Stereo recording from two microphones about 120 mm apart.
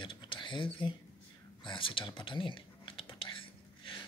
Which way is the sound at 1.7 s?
45° left (ahead or behind).